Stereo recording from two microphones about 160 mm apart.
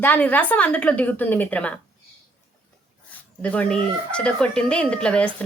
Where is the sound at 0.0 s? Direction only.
10° left (ahead or behind).